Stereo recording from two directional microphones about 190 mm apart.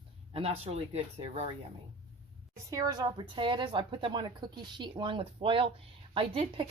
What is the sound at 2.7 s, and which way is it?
A woman's voice, 20° right (ahead or behind).